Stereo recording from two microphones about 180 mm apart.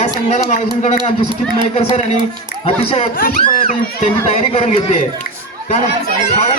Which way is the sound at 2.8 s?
35° left (ahead or behind).